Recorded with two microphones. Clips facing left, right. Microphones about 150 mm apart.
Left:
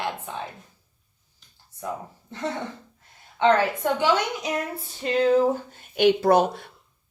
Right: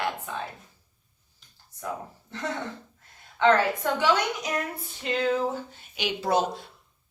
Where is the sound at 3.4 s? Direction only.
20° left (ahead or behind).